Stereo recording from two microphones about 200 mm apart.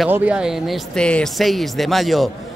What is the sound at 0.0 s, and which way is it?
A man's voice, 5° right (ahead or behind).